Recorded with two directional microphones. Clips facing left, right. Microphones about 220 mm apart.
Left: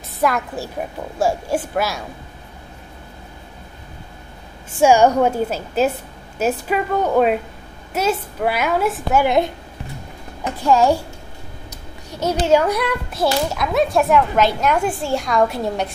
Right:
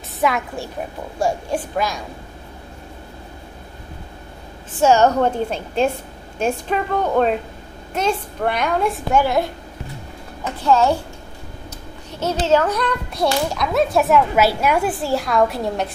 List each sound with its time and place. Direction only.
0.2 s a woman's voice: centre (ahead or behind)
4.7 s a child's voice: 10° left (ahead or behind)
9.2 s a child's voice: 20° left (ahead or behind)
10.6 s a child's voice: 10° left (ahead or behind)
12.1 s a child's voice: 15° left (ahead or behind)